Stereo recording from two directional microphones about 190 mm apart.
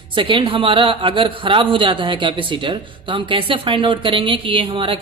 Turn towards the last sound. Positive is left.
turn(degrees=-25)  # may be behind; listen again after turning